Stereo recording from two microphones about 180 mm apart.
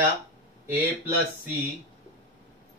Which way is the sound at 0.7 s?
10° right (ahead or behind).